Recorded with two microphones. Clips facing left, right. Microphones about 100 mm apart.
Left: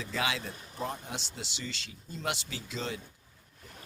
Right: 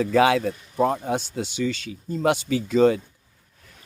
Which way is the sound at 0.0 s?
55° right (ahead or behind).